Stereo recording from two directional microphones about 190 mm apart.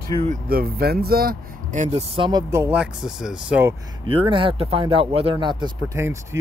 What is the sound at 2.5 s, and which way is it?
Speech, 10° right (ahead or behind).